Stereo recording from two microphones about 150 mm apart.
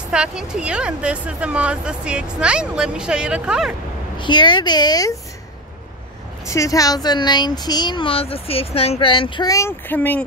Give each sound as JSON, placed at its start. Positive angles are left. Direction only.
{"t": 0.1, "sound": "speech", "side_deg": -5}
{"t": 4.2, "sound": "speech", "side_deg": 30}
{"t": 6.4, "sound": "speech", "side_deg": 20}